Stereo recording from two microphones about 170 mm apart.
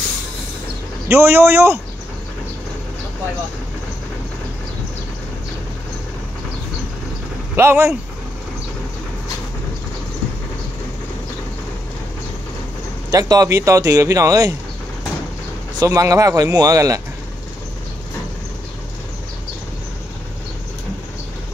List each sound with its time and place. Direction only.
1.0 s a man's voice: 15° right (ahead or behind)
7.5 s a man's voice: 15° right (ahead or behind)
13.1 s speech: 20° right (ahead or behind)
15.8 s speech: 20° right (ahead or behind)